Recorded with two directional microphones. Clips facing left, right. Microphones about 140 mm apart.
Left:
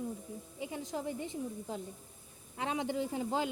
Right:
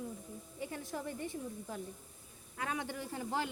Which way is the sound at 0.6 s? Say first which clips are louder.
Left 3 dB; 15° left (ahead or behind).